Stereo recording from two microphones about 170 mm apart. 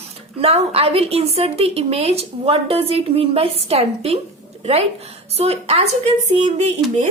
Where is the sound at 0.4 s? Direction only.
35° right (ahead or behind).